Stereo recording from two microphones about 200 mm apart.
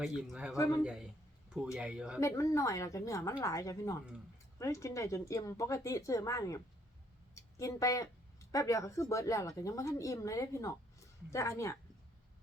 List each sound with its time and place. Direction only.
0.2 s speech: 5° right (ahead or behind)
0.5 s speech: 15° left (ahead or behind)
1.5 s speech: 5° right (ahead or behind)
2.2 s speech: 15° left (ahead or behind)